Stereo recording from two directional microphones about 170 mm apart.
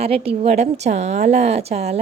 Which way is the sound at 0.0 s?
35° right (ahead or behind).